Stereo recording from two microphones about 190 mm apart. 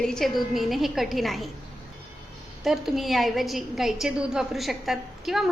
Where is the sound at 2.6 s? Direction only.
Centre (ahead or behind).